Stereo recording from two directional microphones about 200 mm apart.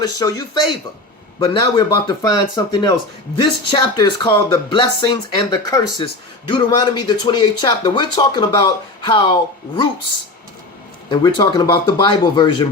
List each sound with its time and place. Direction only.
0.0 s speech: 20° left (ahead or behind)
11.1 s speech: 20° left (ahead or behind)